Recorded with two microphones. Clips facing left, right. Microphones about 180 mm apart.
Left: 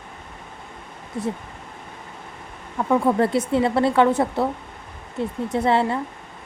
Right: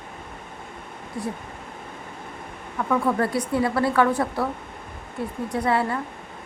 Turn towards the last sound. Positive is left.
turn(degrees=25)  # may be behind; listen again after turning